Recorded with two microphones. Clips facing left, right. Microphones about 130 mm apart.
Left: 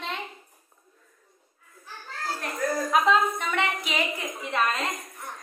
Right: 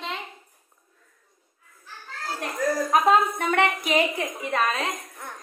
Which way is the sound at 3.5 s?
55° right (ahead or behind).